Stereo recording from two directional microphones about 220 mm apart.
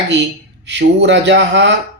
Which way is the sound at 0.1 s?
55° right (ahead or behind).